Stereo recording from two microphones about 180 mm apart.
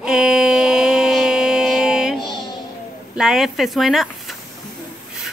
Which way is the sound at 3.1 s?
Centre (ahead or behind).